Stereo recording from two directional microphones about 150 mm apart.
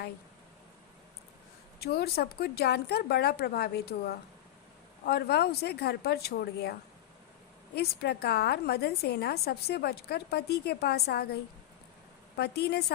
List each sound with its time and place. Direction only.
1.8 s a woman's voice: 90° left
7.8 s a woman's voice: 90° left
12.4 s a woman's voice: 90° left